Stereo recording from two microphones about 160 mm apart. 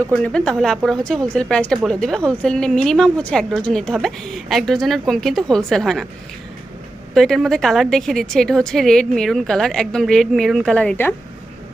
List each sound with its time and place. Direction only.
0.1 s a woman's voice: 5° left (ahead or behind)
7.1 s a woman's voice: centre (ahead or behind)